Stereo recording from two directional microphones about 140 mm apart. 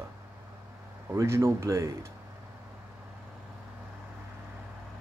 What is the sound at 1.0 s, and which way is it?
Speech, 20° right (ahead or behind).